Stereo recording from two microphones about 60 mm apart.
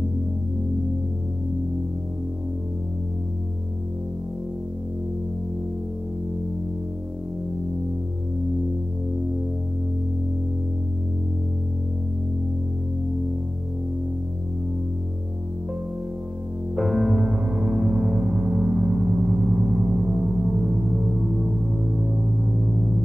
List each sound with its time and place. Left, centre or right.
16.7 s music: centre